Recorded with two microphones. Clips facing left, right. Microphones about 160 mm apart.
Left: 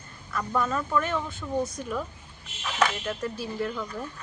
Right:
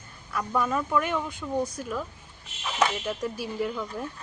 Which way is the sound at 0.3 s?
10° right (ahead or behind).